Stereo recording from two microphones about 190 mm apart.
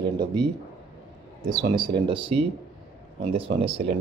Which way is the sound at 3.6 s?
30° right (ahead or behind).